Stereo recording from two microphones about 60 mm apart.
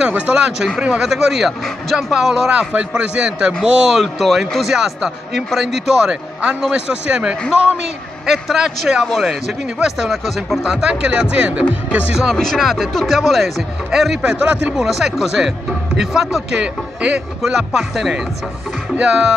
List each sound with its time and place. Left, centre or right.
0.3 s a man's voice: centre
2.7 s a man's voice: centre
4.0 s a man's voice: centre
8.3 s a man's voice: centre
12.3 s speech: centre
14.2 s a man's voice: centre
14.9 s a man's voice: centre